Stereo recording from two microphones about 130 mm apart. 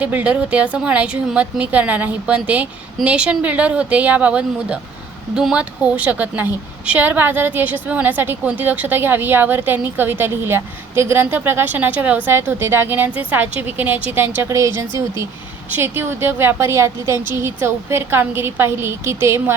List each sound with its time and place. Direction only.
0.0 s a woman's voice: 10° right (ahead or behind)